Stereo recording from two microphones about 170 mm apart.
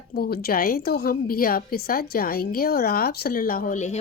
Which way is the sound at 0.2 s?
65° left (ahead or behind).